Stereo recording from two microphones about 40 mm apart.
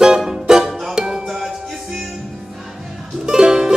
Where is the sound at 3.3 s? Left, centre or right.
Centre.